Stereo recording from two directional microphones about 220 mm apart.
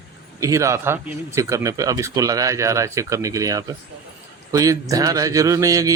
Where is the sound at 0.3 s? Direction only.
15° right (ahead or behind).